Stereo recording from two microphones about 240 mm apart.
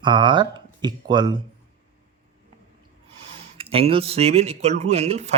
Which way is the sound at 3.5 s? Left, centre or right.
Right.